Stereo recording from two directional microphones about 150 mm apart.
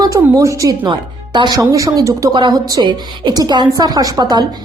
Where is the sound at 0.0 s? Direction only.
20° right (ahead or behind).